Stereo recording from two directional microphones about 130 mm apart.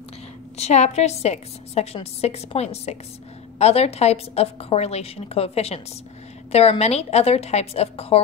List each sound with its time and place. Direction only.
0.6 s a woman's voice: 60° left (ahead or behind)